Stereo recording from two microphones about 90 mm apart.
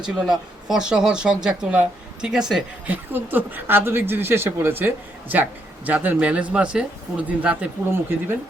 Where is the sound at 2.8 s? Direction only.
20° right (ahead or behind).